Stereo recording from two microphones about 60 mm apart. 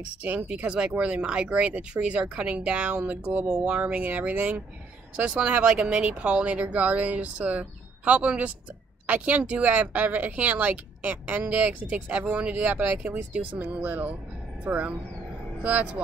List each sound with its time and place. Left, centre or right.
0.2 s speech: right